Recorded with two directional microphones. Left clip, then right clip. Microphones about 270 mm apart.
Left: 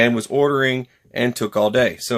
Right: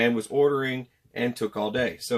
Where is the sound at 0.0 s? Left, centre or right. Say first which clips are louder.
Left 5 dB; left.